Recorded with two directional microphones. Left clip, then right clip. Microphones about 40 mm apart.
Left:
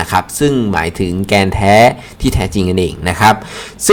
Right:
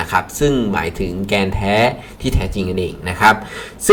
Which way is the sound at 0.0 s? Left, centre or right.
Left.